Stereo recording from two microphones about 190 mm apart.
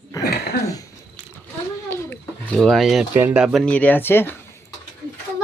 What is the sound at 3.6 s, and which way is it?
Speech, 10° left (ahead or behind).